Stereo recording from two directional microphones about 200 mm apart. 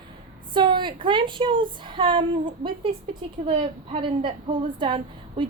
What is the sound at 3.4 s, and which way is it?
A woman's voice, 25° right (ahead or behind).